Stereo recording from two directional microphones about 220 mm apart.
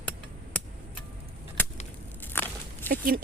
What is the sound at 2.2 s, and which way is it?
Walk, 10° left (ahead or behind).